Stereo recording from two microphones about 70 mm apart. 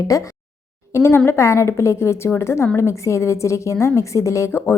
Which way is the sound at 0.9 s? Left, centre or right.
Left.